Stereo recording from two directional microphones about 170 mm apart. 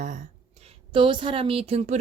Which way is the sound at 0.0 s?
45° right (ahead or behind).